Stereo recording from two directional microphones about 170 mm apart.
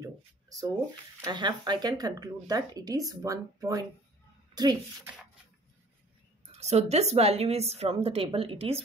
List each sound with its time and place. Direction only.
0.0 s a sound: 20° right (ahead or behind)
1.2 s speech: 25° right (ahead or behind)
6.6 s a woman's voice: 40° right (ahead or behind)